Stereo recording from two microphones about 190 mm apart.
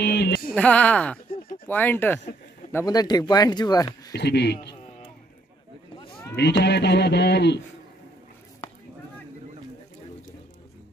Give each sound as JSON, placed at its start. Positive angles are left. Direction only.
{"t": 0.0, "sound": "a sound", "side_deg": 60}
{"t": 0.6, "sound": "speech", "side_deg": 5}
{"t": 4.1, "sound": "speech", "side_deg": 60}
{"t": 6.3, "sound": "speech", "side_deg": 60}